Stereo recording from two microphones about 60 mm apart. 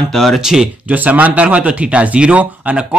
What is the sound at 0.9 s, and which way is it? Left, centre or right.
Speech, right.